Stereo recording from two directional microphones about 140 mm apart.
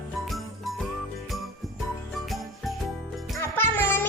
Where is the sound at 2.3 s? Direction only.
Centre (ahead or behind).